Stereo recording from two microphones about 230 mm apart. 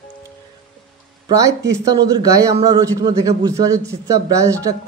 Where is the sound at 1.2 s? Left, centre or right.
Centre.